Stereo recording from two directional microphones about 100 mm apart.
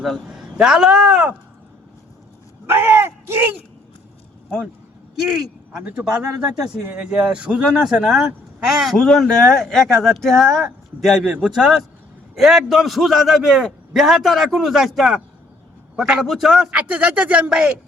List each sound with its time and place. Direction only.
0.0 s a man's voice: 5° right (ahead or behind)
2.6 s speech: 25° right (ahead or behind)
5.2 s a man's voice: 5° right (ahead or behind)
11.3 s a man's voice: 10° right (ahead or behind)